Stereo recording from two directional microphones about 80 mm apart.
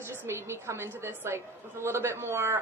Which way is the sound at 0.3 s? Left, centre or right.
Right.